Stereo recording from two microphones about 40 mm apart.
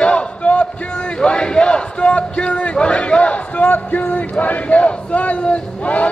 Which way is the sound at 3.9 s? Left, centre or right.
Left.